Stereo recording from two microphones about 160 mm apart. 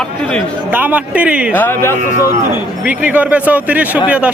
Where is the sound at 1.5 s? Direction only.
15° left (ahead or behind).